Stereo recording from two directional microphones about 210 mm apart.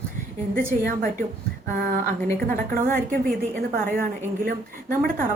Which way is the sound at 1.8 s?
45° right (ahead or behind).